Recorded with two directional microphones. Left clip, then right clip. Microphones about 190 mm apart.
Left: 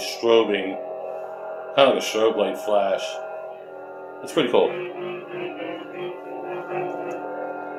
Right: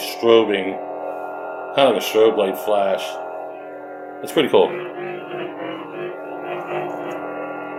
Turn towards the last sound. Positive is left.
turn(degrees=-35)  # may be behind; listen again after turning